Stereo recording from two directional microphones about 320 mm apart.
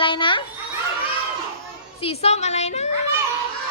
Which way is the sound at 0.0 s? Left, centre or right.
Centre.